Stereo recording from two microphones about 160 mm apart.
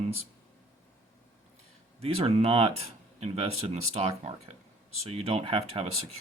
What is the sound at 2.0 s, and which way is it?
Speech, 35° right (ahead or behind).